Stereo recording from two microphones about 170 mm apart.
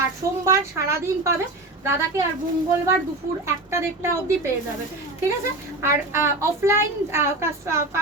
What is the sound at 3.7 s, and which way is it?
Speech, 15° right (ahead or behind).